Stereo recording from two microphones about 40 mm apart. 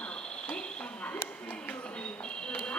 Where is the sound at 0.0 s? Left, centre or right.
Left.